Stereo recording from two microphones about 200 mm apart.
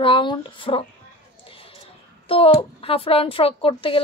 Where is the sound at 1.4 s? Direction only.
25° left (ahead or behind).